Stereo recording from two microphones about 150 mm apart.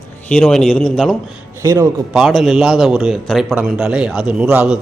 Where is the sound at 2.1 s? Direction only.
Centre (ahead or behind).